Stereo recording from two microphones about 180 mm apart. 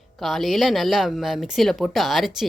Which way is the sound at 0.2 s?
Centre (ahead or behind).